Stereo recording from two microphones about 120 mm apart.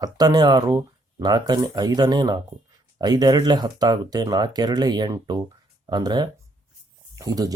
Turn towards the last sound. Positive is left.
turn(degrees=-30)  # may be behind; listen again after turning